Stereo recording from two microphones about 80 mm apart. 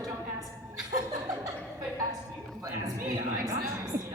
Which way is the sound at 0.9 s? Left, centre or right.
Right.